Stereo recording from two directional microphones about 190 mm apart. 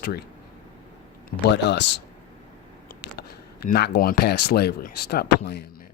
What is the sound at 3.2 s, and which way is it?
Speech, 55° left (ahead or behind).